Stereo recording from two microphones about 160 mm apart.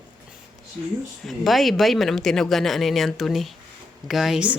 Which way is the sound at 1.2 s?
Centre (ahead or behind).